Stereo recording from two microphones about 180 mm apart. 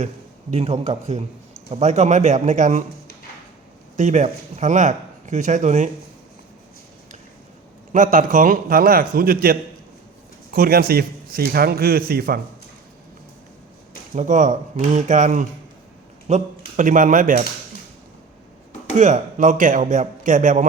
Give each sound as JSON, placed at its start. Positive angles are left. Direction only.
{"t": 0.5, "sound": "speech", "side_deg": -35}
{"t": 3.9, "sound": "speech", "side_deg": -40}
{"t": 7.9, "sound": "a man's voice", "side_deg": -45}
{"t": 14.2, "sound": "speech", "side_deg": -45}
{"t": 18.9, "sound": "speech", "side_deg": -40}